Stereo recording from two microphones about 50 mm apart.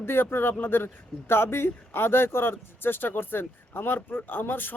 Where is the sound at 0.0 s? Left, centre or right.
Left.